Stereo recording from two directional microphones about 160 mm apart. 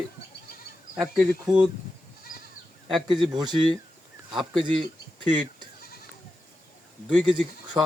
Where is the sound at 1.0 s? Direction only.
Centre (ahead or behind).